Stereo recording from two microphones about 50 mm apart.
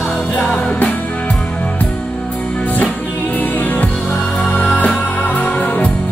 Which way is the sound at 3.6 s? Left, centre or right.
Left.